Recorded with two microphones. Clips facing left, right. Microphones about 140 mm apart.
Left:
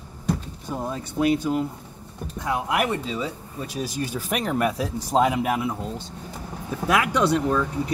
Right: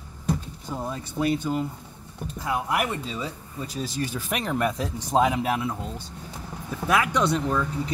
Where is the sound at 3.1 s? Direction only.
10° left (ahead or behind).